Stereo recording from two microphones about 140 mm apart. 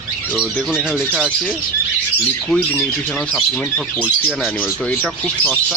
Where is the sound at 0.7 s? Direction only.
5° right (ahead or behind).